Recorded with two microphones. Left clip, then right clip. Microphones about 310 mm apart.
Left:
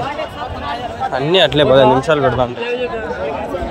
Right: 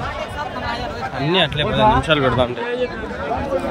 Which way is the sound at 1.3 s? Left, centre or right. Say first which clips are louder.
Left 6 dB; centre.